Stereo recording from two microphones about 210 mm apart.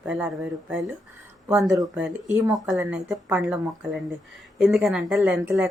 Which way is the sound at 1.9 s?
5° right (ahead or behind).